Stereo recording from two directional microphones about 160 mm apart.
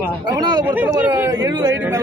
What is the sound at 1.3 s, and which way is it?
Speech, 25° right (ahead or behind).